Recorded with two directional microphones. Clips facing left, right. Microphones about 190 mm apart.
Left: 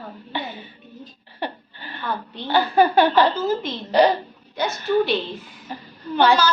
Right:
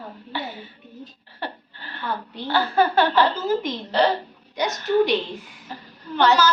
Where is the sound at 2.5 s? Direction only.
15° left (ahead or behind).